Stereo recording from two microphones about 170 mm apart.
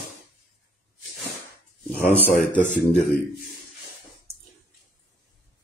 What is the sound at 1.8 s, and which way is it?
Speech, 5° left (ahead or behind).